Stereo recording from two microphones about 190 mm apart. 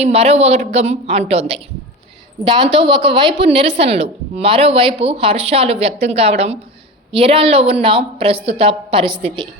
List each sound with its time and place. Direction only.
0.0 s a woman's voice: 35° right (ahead or behind)